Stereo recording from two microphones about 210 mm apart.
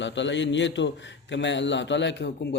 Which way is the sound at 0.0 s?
60° left (ahead or behind).